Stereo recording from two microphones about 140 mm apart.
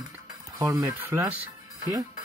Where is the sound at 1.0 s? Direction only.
10° right (ahead or behind).